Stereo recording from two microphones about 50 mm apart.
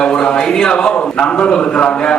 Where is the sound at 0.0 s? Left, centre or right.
Centre.